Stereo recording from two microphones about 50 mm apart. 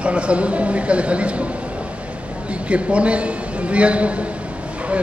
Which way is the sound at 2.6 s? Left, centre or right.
Right.